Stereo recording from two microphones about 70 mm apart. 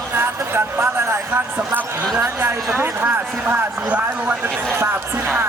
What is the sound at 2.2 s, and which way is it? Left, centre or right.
Speech, right.